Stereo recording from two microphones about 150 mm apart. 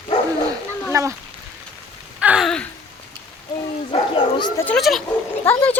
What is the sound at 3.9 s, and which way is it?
Speech, 35° left (ahead or behind).